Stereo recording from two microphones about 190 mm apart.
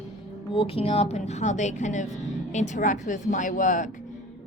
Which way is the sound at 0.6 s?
30° left (ahead or behind).